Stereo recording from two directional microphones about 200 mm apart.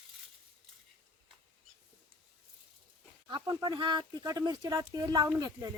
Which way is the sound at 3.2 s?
20° right (ahead or behind).